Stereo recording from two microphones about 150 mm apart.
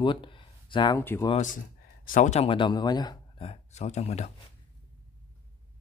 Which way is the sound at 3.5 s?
50° left (ahead or behind).